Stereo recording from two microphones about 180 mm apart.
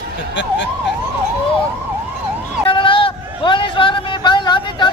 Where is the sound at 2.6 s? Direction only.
30° left (ahead or behind).